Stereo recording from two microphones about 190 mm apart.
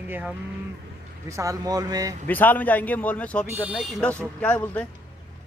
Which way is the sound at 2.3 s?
10° left (ahead or behind).